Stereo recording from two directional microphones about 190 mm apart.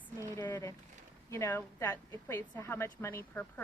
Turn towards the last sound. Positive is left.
turn(degrees=10)  # may be behind; listen again after turning